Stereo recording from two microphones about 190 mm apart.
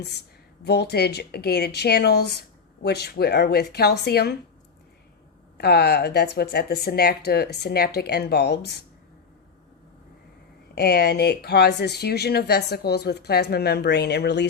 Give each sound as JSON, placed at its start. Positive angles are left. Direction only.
{"t": 0.6, "sound": "speech", "side_deg": 60}
{"t": 5.5, "sound": "speech", "side_deg": 55}
{"t": 10.8, "sound": "speech", "side_deg": 60}